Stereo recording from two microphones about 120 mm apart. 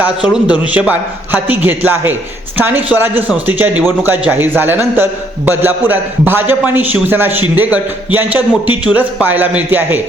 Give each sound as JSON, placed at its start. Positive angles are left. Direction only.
{"t": 0.0, "sound": "a man's voice", "side_deg": -10}